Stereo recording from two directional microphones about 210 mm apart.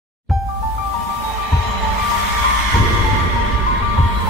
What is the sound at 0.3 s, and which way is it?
Music, centre (ahead or behind).